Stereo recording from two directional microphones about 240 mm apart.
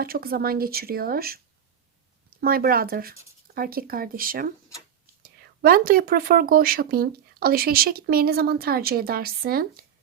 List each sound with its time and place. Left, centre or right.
0.0 s speech: right